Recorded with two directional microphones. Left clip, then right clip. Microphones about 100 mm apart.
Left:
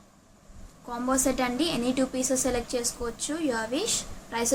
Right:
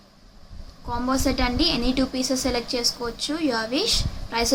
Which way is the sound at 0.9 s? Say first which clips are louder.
Right 3 dB; centre (ahead or behind).